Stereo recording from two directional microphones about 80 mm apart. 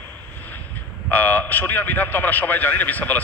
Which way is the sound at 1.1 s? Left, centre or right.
Left.